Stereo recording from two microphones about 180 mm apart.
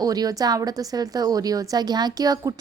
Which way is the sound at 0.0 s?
20° right (ahead or behind).